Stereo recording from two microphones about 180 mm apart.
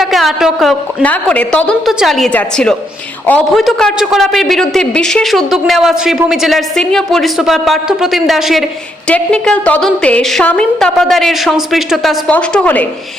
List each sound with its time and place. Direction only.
0.0 s a man's voice: centre (ahead or behind)